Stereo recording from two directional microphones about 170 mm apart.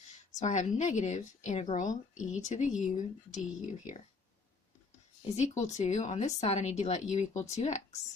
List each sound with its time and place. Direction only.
0.3 s speech: 45° left (ahead or behind)
5.2 s speech: 40° left (ahead or behind)